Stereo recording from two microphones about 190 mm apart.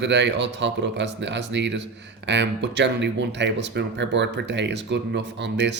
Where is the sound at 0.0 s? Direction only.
65° right (ahead or behind).